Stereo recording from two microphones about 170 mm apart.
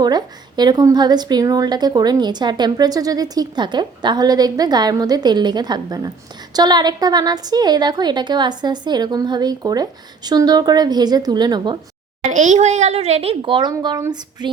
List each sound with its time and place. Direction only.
0.0 s a woman's voice: 25° right (ahead or behind)
12.3 s a child's voice: 45° right (ahead or behind); by 14.5 s 25° right (ahead or behind)